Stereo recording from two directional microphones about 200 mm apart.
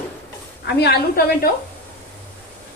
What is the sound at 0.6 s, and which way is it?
Speech, 55° left (ahead or behind).